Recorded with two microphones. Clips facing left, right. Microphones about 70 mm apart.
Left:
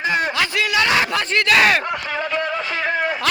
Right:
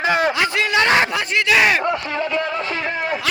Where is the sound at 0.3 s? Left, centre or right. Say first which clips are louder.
Right 1 dB; right.